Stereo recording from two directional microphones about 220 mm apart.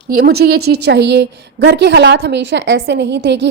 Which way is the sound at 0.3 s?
45° right (ahead or behind).